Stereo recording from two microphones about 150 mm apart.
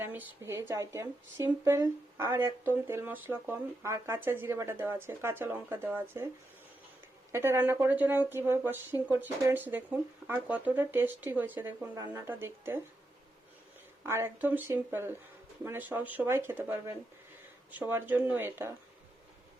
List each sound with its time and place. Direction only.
0.0 s speech: 15° right (ahead or behind)
7.3 s speech: 15° right (ahead or behind)
14.0 s speech: 15° right (ahead or behind)